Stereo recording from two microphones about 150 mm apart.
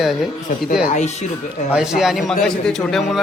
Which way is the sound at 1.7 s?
5° right (ahead or behind).